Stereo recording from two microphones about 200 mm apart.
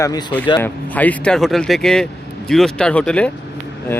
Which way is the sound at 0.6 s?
10° left (ahead or behind).